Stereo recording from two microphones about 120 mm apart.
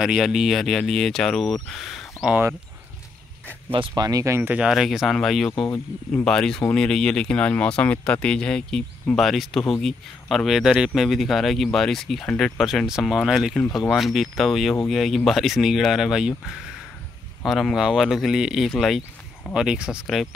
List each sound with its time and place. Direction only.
0.0 s speech: 5° right (ahead or behind)
3.9 s speech: 30° right (ahead or behind); by 20.2 s centre (ahead or behind)